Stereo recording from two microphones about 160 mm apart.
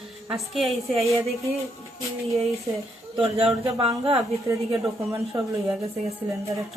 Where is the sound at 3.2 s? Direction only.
40° right (ahead or behind).